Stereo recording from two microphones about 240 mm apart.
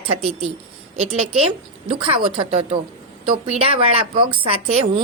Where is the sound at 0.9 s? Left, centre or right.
Right.